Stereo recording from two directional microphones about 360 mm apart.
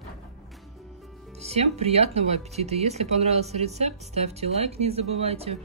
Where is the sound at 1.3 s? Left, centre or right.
Centre.